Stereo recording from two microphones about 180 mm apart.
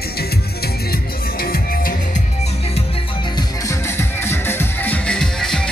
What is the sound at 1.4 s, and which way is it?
Music, 55° left (ahead or behind).